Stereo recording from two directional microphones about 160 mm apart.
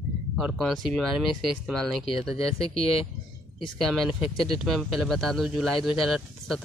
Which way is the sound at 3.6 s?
Centre (ahead or behind).